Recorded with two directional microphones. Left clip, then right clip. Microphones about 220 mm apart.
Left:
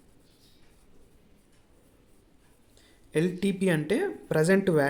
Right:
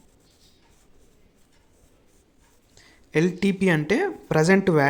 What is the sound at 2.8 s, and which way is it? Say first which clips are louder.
A woman's voice: right 5 dB; 15° right (ahead or behind).